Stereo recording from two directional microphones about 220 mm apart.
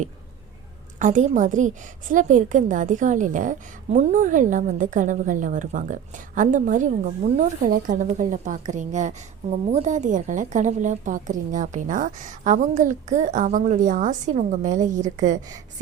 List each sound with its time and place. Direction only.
0.9 s a woman's voice: 35° right (ahead or behind)